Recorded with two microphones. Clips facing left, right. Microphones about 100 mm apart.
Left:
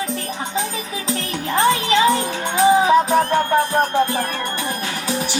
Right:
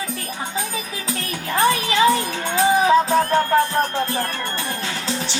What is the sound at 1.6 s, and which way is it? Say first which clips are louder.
Music: left 1 dB; 20° left (ahead or behind).